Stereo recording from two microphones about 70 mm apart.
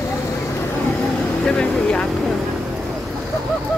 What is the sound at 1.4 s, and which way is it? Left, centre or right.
Vehicle, centre.